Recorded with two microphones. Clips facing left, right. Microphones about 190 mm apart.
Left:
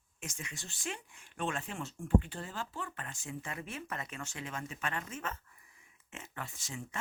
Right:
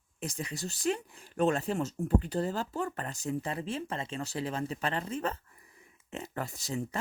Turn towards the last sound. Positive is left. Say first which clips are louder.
# right 9 dB
turn(degrees=-35)  # may be behind; listen again after turning